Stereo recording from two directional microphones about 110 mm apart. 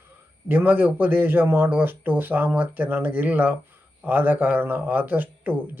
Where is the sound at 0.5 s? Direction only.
15° right (ahead or behind).